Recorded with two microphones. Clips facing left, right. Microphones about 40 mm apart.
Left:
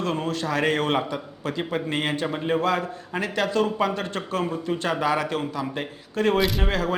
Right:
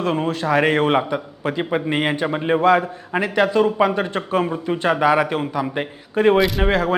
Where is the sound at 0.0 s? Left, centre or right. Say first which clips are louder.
Right 5 dB; right.